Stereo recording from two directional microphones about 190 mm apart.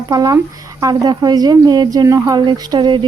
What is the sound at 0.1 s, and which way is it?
Speech, 20° right (ahead or behind).